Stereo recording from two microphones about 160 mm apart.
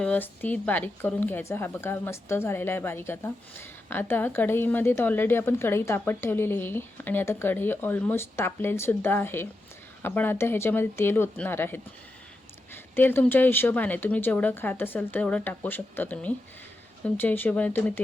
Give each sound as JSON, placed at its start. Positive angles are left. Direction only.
{"t": 0.0, "sound": "speech", "side_deg": 10}